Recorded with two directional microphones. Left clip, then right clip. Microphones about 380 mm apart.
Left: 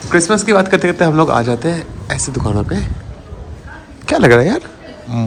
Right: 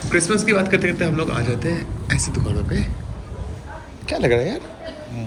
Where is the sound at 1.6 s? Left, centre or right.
Left.